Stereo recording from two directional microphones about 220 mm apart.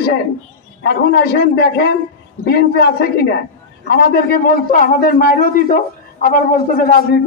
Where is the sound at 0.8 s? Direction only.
45° left (ahead or behind).